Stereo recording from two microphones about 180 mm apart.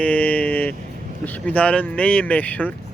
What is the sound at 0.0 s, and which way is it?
Vehicle, 10° left (ahead or behind).